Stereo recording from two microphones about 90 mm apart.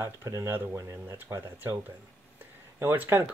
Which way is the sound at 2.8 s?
25° right (ahead or behind).